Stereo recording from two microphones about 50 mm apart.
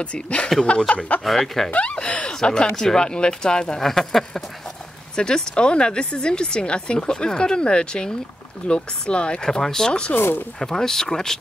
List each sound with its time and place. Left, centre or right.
0.0 s chuckle: left
1.2 s speech: centre
1.7 s speech: left
10.1 s speech: left
10.6 s speech: centre